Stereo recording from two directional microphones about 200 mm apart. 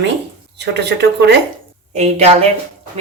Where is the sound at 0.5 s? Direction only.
55° right (ahead or behind).